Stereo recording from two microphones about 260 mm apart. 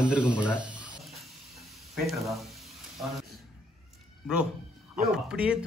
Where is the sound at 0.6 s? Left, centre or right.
Centre.